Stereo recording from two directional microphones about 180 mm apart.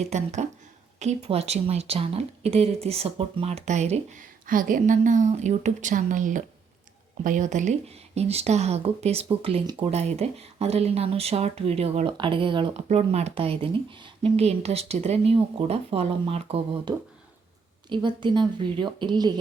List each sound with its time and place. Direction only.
0.1 s speech: 40° right (ahead or behind); by 19.3 s 25° right (ahead or behind)